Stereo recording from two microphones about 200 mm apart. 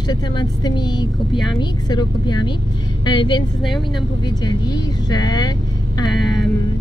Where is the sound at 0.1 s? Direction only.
20° left (ahead or behind).